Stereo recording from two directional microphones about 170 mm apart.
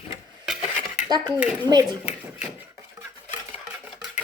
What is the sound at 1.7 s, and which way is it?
Speech, 25° right (ahead or behind).